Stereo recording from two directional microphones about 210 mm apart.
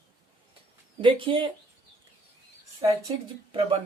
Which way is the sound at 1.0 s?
25° right (ahead or behind).